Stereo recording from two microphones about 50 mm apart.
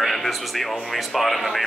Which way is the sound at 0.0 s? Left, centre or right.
Centre.